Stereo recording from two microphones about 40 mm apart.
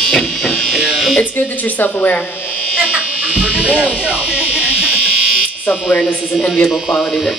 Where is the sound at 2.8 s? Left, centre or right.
Right.